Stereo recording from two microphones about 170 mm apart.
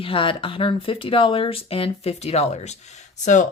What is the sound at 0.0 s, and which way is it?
Speech, 30° left (ahead or behind).